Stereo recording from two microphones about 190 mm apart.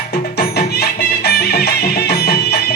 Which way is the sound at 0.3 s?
55° left (ahead or behind).